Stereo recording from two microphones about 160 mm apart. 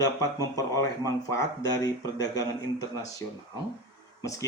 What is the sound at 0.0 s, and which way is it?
Speech, 20° left (ahead or behind).